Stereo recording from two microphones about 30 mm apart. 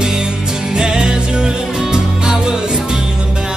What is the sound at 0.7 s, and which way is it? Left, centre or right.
Music, right.